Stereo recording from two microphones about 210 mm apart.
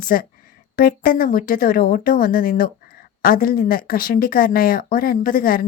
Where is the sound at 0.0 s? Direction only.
40° left (ahead or behind).